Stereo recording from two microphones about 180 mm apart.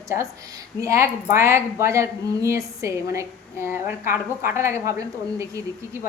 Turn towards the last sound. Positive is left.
turn(degrees=-15)  # may be behind; listen again after turning